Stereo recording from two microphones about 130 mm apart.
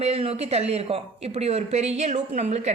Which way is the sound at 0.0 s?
50° right (ahead or behind).